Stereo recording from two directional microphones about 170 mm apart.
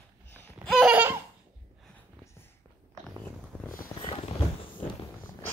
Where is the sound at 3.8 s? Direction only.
30° left (ahead or behind).